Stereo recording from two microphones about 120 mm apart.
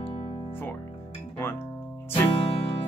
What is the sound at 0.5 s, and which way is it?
Music, 15° left (ahead or behind).